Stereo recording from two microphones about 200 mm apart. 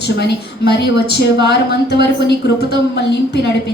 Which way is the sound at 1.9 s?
55° left (ahead or behind).